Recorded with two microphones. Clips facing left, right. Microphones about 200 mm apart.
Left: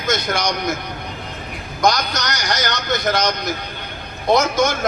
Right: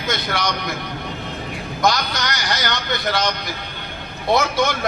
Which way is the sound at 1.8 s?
45° left (ahead or behind).